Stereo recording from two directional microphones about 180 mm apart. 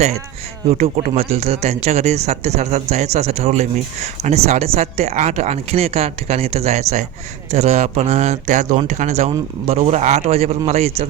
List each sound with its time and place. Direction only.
0.7 s speech: 35° right (ahead or behind)